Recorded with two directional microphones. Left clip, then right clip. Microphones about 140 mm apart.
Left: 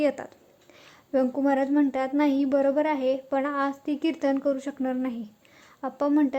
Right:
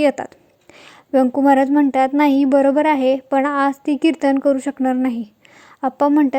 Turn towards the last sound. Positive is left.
turn(degrees=-40)  # may be behind; listen again after turning